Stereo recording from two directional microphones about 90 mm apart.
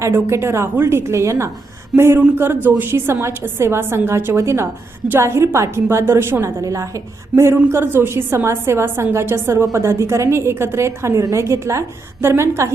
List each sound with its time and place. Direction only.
0.1 s a woman's voice: 30° right (ahead or behind)